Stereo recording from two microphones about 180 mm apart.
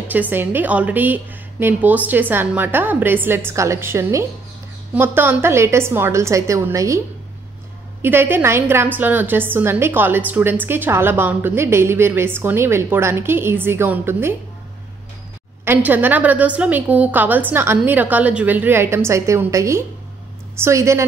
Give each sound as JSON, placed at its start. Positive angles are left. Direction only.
{"t": 0.1, "sound": "a woman's voice", "side_deg": -10}
{"t": 8.0, "sound": "a woman's voice", "side_deg": -10}
{"t": 15.6, "sound": "a woman's voice", "side_deg": -10}